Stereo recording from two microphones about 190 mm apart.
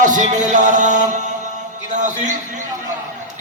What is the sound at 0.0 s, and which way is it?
A man's voice, 40° right (ahead or behind).